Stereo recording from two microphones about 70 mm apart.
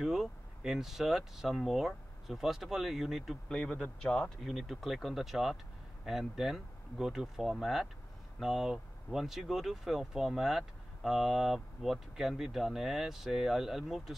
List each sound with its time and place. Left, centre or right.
0.0 s speech: centre
3.4 s a man's voice: centre
4.4 s speech: centre